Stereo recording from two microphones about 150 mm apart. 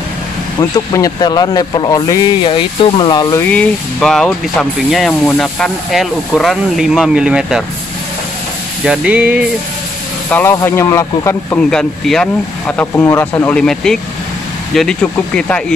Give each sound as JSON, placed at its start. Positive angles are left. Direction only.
{"t": 0.6, "sound": "speech", "side_deg": 20}
{"t": 3.4, "sound": "speech", "side_deg": 5}
{"t": 8.8, "sound": "speech", "side_deg": -5}
{"t": 10.3, "sound": "speech", "side_deg": 15}
{"t": 11.7, "sound": "speech", "side_deg": 5}